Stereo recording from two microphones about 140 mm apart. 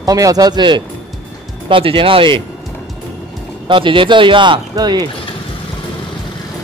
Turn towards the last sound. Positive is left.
turn(degrees=-30)  # may be behind; listen again after turning